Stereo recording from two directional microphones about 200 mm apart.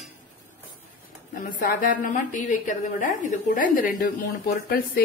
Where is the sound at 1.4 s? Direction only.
45° left (ahead or behind).